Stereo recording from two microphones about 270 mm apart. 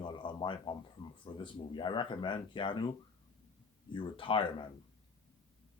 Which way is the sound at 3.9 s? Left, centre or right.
Centre.